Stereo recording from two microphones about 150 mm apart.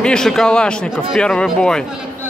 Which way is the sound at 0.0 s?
5° left (ahead or behind).